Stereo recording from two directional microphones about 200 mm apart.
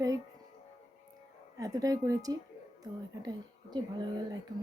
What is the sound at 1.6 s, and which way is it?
Speech, 15° right (ahead or behind).